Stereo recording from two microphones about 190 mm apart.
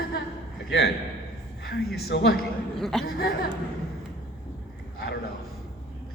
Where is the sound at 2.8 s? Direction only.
Centre (ahead or behind).